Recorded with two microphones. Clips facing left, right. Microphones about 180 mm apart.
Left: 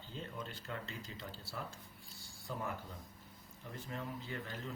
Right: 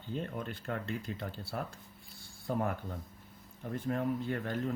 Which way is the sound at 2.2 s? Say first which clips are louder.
Right 10 dB; 55° right (ahead or behind).